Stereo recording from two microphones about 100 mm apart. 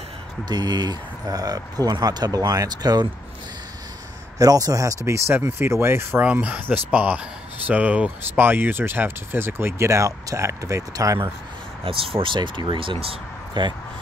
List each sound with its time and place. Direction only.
0.5 s speech: 45° right (ahead or behind)
4.4 s speech: 40° right (ahead or behind)
11.8 s speech: 65° right (ahead or behind)